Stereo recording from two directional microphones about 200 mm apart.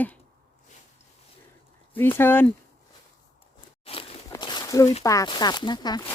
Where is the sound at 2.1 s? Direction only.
10° left (ahead or behind).